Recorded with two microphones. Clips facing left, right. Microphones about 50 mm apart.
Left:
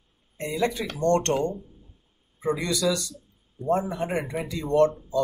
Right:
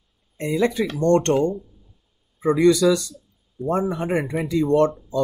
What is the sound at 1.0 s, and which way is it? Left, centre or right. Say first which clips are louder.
Speech: right 4 dB; right.